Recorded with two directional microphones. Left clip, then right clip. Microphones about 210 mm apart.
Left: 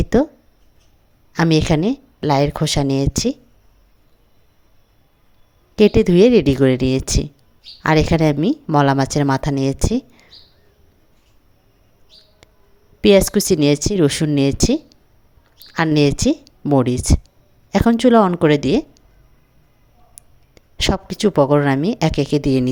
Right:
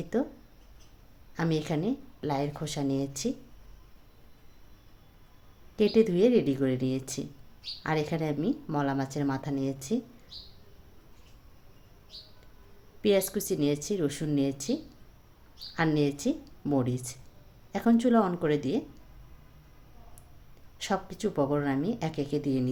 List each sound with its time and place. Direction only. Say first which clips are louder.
0.0 s speech: left 14 dB; 45° left (ahead or behind)
1.3 s speech: left 14 dB; 45° left (ahead or behind)
5.7 s speech: left 11 dB; 45° left (ahead or behind)
13.0 s speech: left 13 dB; 45° left (ahead or behind)
20.7 s speech: left 12 dB; 45° left (ahead or behind)